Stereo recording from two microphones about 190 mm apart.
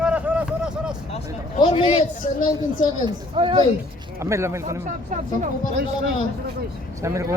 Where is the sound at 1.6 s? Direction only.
30° left (ahead or behind).